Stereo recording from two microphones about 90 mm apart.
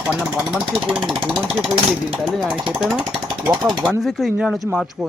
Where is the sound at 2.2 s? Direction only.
Centre (ahead or behind).